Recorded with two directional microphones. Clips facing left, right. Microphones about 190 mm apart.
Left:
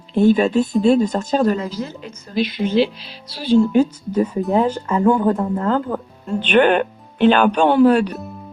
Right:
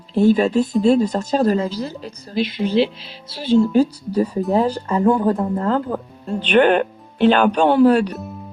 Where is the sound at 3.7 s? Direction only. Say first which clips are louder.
Even; 35° right (ahead or behind).